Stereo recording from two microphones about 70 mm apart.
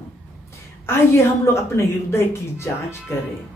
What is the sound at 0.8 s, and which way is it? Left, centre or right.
A woman's voice, left.